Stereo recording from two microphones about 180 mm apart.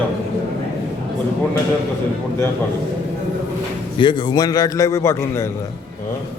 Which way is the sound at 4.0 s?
25° left (ahead or behind).